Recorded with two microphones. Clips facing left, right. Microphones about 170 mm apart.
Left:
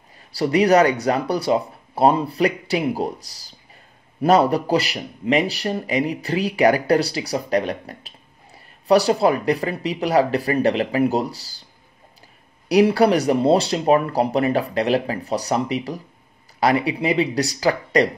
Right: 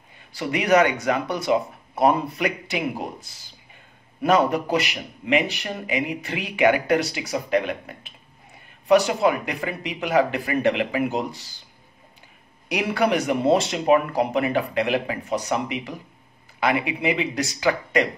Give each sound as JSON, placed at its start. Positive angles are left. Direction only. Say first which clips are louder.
{"t": 0.3, "sound": "speech", "louder": "left 4 dB", "side_deg": 35}
{"t": 12.6, "sound": "speech", "louder": "left 7 dB", "side_deg": 35}